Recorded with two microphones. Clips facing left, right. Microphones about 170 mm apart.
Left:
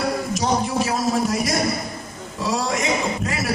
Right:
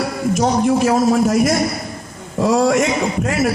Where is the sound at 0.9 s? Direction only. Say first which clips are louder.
Right 7 dB; 50° right (ahead or behind).